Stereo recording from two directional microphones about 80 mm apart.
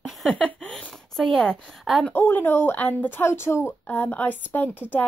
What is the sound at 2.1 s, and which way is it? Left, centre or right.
Speech, left.